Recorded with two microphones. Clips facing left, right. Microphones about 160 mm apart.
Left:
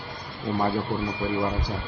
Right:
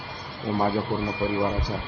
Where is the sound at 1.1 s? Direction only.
35° right (ahead or behind).